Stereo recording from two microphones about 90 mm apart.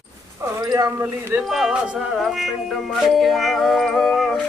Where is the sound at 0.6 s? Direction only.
45° right (ahead or behind).